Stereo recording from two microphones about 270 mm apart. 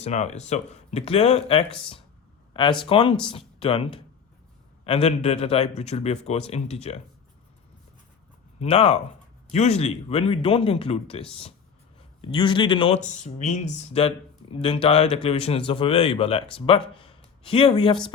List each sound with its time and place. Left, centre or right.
0.0 s speech: left
4.9 s speech: left
8.5 s speech: left